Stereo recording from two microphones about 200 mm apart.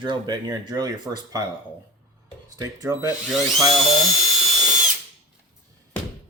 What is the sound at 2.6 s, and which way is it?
Speech, 15° right (ahead or behind).